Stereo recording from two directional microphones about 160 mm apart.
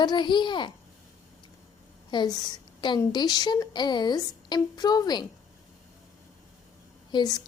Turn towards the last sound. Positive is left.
turn(degrees=25)  # may be behind; listen again after turning